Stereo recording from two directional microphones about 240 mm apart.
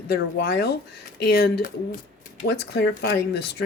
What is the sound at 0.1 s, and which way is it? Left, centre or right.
A woman's voice, left.